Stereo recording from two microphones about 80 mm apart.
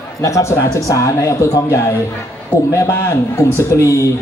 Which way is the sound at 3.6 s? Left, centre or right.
Left.